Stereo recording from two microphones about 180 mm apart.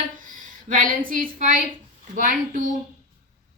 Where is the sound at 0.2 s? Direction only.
50° right (ahead or behind).